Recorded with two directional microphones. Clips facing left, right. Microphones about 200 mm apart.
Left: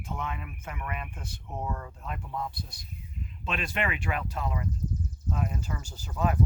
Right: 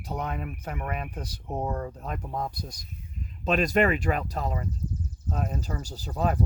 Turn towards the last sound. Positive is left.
turn(degrees=-35)  # may be behind; listen again after turning